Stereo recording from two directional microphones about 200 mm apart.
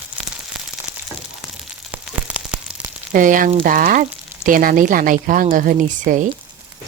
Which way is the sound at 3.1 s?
40° right (ahead or behind).